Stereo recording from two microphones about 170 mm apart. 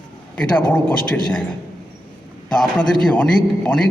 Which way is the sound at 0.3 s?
10° left (ahead or behind).